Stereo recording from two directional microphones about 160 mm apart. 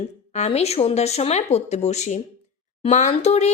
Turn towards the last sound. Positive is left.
turn(degrees=40)  # may be behind; listen again after turning